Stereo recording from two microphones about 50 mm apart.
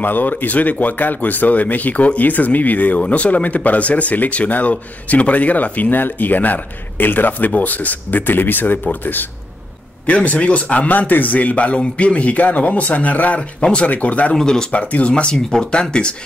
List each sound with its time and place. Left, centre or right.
0.0 s speech: left
10.0 s a man's voice: left
14.3 s speech: centre
14.7 s a man's voice: left
15.3 s speech: centre